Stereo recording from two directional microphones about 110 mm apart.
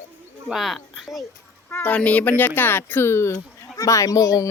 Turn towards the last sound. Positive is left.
turn(degrees=30)  # may be behind; listen again after turning